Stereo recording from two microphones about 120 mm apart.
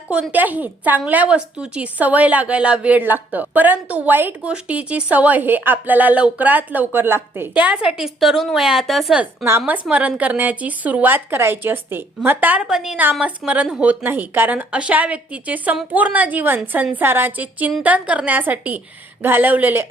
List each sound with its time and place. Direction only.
0.1 s speech: 10° right (ahead or behind)
9.2 s speech: 15° right (ahead or behind)